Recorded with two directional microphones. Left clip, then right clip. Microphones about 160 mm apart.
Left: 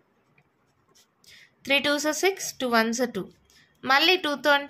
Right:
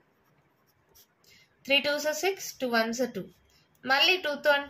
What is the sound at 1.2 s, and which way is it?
A woman's voice, 55° left (ahead or behind).